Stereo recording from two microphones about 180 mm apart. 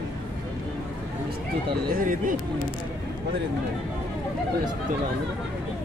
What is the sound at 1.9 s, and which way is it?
Speech, 50° right (ahead or behind).